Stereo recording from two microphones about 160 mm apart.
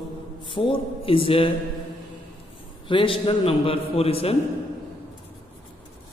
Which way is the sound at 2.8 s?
30° left (ahead or behind).